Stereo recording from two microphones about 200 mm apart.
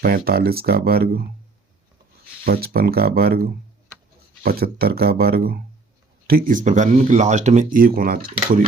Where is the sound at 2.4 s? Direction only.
50° right (ahead or behind).